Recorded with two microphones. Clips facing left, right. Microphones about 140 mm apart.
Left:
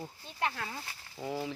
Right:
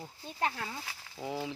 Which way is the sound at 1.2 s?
15° right (ahead or behind).